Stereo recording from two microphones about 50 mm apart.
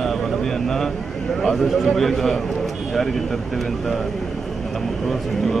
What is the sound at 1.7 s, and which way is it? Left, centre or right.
Speech, centre.